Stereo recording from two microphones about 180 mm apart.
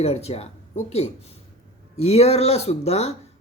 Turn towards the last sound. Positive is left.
turn(degrees=35)  # may be behind; listen again after turning